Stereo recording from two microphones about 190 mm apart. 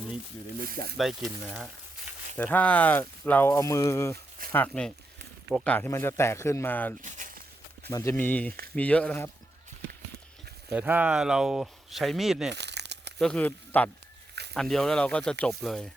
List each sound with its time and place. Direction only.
0.7 s speech: 50° right (ahead or behind)
0.9 s speech: centre (ahead or behind)
2.4 s speech: 10° left (ahead or behind)
7.0 s a sound: 45° right (ahead or behind)
7.9 s speech: 15° left (ahead or behind)
10.7 s speech: 10° right (ahead or behind)
12.5 s crumpling: 65° right (ahead or behind)
13.1 s speech: 5° left (ahead or behind)